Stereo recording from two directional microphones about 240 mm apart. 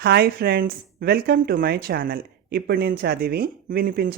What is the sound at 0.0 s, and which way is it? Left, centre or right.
Speech, right.